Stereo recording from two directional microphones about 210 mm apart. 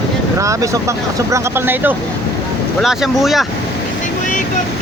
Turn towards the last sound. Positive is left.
turn(degrees=0)  # may be behind; listen again after turning